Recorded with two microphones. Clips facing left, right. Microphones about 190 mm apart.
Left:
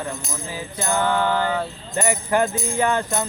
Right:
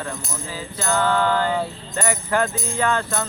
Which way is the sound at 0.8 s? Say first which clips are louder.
Right 1 dB; 15° left (ahead or behind).